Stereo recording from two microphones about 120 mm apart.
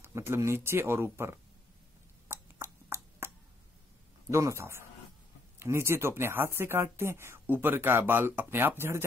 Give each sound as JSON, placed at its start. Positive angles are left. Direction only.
{"t": 0.0, "sound": "speech", "side_deg": -20}
{"t": 2.2, "sound": "a sound", "side_deg": -20}
{"t": 4.3, "sound": "speech", "side_deg": -25}